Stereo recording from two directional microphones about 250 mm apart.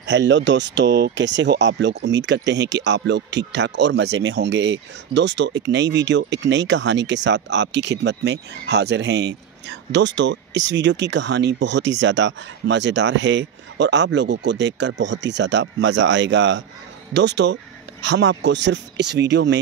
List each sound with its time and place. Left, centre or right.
0.0 s speech: right